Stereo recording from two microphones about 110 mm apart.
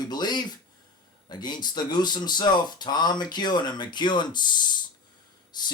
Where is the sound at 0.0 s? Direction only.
40° left (ahead or behind).